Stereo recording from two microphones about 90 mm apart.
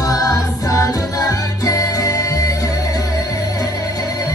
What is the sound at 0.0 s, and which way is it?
Music, 40° left (ahead or behind).